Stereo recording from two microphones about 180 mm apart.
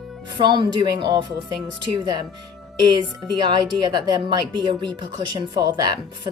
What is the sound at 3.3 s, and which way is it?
Speech, 25° right (ahead or behind).